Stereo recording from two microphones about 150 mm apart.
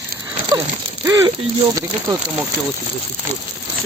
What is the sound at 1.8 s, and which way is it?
Speech, 25° right (ahead or behind).